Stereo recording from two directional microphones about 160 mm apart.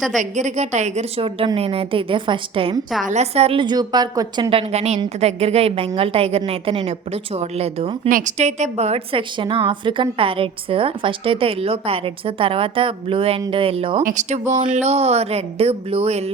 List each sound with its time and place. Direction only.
0.2 s a woman's voice: 45° right (ahead or behind)
3.1 s a woman's voice: 45° right (ahead or behind); by 4.4 s 25° right (ahead or behind)
4.4 s a woman's voice: 40° right (ahead or behind)
14.0 s a woman's voice: 50° right (ahead or behind)